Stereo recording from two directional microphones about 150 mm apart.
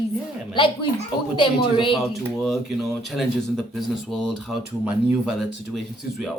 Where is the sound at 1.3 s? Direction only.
35° left (ahead or behind).